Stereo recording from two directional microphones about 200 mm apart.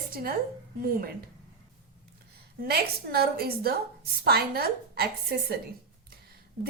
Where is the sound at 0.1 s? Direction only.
50° right (ahead or behind).